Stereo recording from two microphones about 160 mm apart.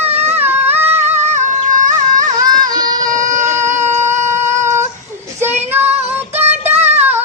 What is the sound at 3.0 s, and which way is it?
Baby cry, 55° right (ahead or behind).